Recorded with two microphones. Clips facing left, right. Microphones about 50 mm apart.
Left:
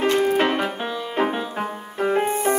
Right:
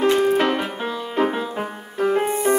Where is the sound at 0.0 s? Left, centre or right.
Left.